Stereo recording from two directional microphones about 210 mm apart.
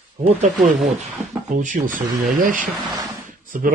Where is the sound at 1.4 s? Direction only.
40° right (ahead or behind).